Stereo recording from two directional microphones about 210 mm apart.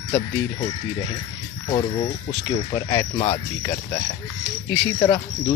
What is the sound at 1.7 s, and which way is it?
A man's voice, 30° left (ahead or behind).